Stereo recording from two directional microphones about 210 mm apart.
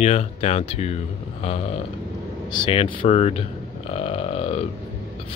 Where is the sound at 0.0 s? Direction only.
30° left (ahead or behind).